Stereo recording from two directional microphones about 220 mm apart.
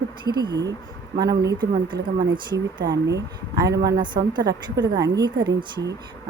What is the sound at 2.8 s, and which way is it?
Speech, 50° right (ahead or behind).